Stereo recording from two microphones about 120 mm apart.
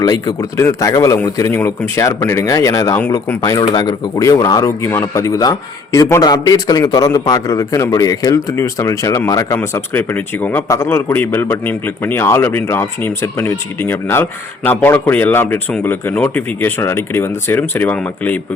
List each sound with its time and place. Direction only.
0.0 s speech: 30° left (ahead or behind)
9.6 s a man's voice: 15° left (ahead or behind)